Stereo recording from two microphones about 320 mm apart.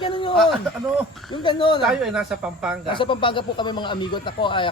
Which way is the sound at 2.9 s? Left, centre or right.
Centre.